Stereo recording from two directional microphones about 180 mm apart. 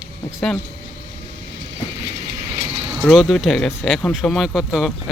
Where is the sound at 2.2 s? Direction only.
20° right (ahead or behind).